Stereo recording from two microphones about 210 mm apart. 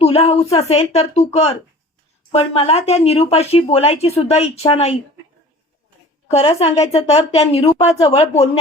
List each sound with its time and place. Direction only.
0.0 s speech: 30° left (ahead or behind)
6.2 s speech: 30° left (ahead or behind)